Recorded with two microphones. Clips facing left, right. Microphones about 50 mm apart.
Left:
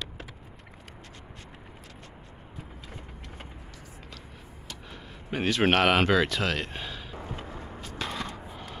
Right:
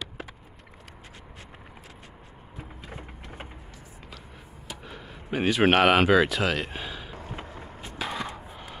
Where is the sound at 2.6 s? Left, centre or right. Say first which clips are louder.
Right 4 dB; centre.